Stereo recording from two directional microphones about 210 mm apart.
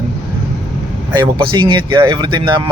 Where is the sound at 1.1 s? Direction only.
20° right (ahead or behind).